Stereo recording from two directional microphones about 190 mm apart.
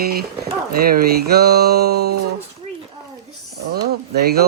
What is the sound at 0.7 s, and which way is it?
A man's voice, 50° right (ahead or behind).